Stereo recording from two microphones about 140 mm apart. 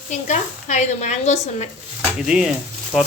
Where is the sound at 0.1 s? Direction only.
55° left (ahead or behind).